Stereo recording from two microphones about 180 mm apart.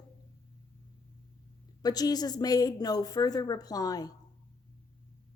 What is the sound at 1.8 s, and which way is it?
A woman's voice, 20° left (ahead or behind).